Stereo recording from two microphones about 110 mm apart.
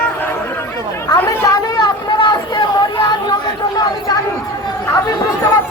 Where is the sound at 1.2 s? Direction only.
30° left (ahead or behind).